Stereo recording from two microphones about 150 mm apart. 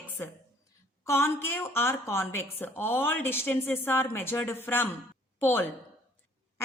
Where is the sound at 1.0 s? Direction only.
15° left (ahead or behind).